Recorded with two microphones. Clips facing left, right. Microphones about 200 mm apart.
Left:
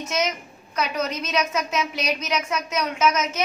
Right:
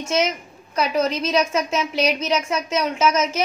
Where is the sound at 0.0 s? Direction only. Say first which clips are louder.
Right 4 dB; 30° right (ahead or behind).